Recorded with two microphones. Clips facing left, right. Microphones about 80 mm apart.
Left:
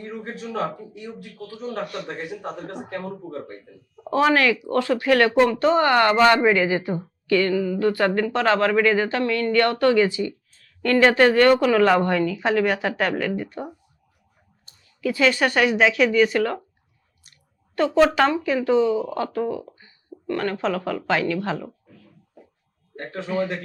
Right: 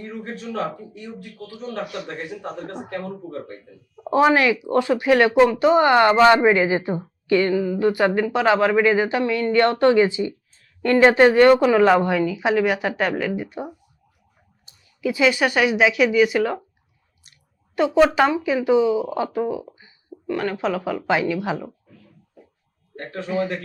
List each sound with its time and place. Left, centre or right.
0.0 s a man's voice: centre
1.8 s speech: centre
2.0 s a man's voice: centre
2.7 s speech: centre
3.0 s a man's voice: centre
4.1 s speech: centre
15.0 s speech: centre
17.7 s speech: centre
23.0 s a man's voice: centre
23.3 s speech: centre